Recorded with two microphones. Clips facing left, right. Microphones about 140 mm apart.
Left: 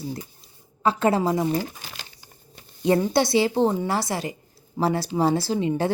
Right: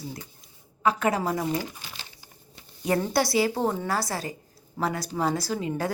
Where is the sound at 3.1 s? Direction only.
25° left (ahead or behind).